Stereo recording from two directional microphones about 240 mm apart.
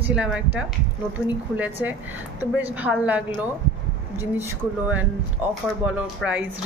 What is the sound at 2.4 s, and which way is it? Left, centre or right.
Speech, centre.